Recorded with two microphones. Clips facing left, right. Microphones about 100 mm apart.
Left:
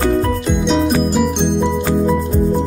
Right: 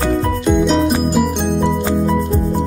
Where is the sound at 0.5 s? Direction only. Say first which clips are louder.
Right 4 dB; centre (ahead or behind).